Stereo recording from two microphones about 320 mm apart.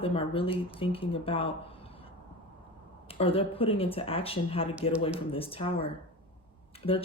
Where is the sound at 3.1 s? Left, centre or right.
Centre.